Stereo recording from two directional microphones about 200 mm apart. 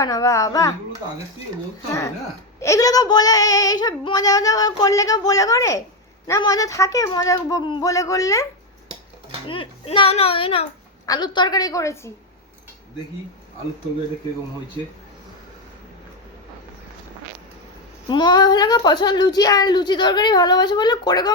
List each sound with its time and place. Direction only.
0.0 s child singing: 15° left (ahead or behind)
1.9 s child singing: 15° left (ahead or behind)
9.5 s a woman's voice: 25° left (ahead or behind)
11.0 s child singing: 20° left (ahead or behind)
18.1 s a woman's voice: 20° left (ahead or behind)